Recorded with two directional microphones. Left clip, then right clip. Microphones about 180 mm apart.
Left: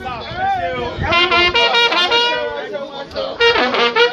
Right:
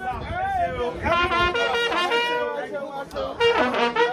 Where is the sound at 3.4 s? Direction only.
15° right (ahead or behind).